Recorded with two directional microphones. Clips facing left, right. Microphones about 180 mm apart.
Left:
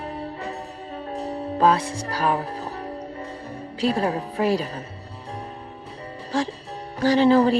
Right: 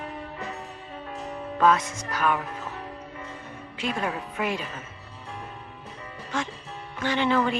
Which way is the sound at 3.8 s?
35° left (ahead or behind).